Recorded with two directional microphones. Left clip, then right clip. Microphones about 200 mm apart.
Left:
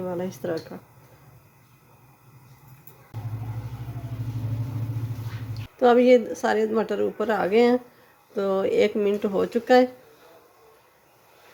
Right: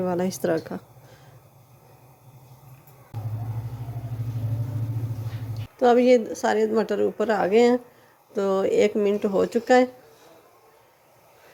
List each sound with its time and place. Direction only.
0.0 s speech: 25° right (ahead or behind)
5.7 s a woman's voice: centre (ahead or behind)